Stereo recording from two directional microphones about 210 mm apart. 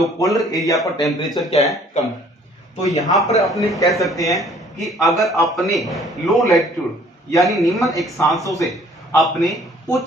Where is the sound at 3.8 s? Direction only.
15° left (ahead or behind).